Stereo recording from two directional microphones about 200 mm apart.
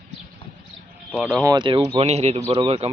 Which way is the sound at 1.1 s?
5° right (ahead or behind).